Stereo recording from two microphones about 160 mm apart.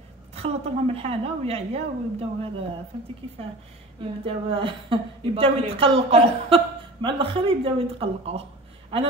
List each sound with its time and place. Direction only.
0.3 s a woman's voice: 40° right (ahead or behind)
4.0 s a woman's voice: 35° right (ahead or behind)